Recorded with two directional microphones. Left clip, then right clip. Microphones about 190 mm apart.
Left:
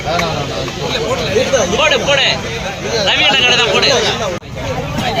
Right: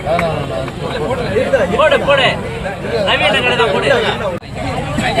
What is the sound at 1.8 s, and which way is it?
Speech, 35° left (ahead or behind).